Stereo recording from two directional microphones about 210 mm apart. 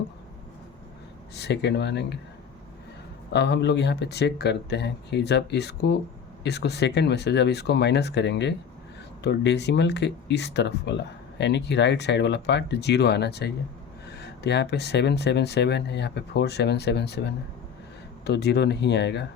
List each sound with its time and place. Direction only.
1.4 s speech: 55° left (ahead or behind)
3.3 s speech: 55° left (ahead or behind)